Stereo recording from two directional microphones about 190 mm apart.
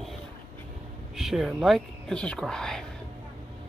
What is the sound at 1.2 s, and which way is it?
Speech, centre (ahead or behind).